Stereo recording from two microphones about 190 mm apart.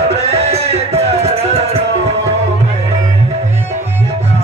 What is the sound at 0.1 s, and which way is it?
Music, 35° right (ahead or behind).